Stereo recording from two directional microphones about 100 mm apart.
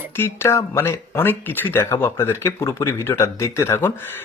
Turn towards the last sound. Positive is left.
turn(degrees=25)  # may be behind; listen again after turning